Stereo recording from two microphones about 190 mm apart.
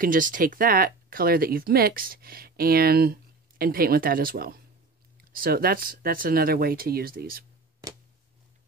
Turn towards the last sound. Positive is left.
turn(degrees=-50)  # may be behind; listen again after turning